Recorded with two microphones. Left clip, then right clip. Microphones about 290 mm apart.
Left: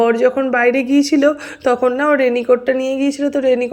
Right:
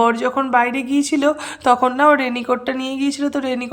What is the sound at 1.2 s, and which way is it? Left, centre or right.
Speech, right.